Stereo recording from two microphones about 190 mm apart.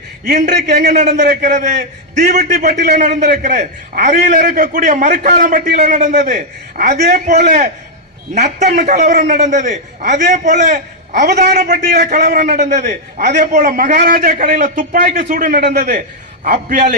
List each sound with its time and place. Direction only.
0.9 s a man's voice: 40° right (ahead or behind)
11.4 s a man's voice: 55° right (ahead or behind)